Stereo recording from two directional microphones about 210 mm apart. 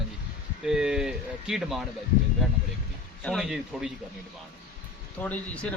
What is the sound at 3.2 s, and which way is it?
Speech, centre (ahead or behind).